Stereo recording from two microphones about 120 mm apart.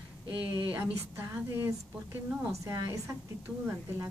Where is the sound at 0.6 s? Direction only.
10° right (ahead or behind).